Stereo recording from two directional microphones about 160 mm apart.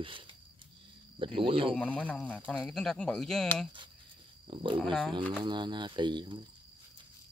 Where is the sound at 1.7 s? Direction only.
10° left (ahead or behind).